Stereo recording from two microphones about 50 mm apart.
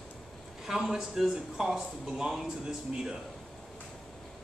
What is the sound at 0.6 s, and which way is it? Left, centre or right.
Speech, centre.